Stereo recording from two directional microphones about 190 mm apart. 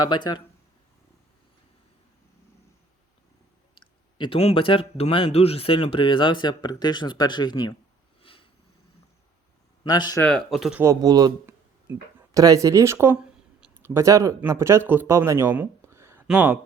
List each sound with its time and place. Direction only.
0.1 s speech: 25° left (ahead or behind)
3.8 s speech: 25° left (ahead or behind)
8.2 s a sound: 30° left (ahead or behind)
9.8 s speech: 20° left (ahead or behind)
10.2 s speech: centre (ahead or behind)
10.8 s speech: 20° right (ahead or behind)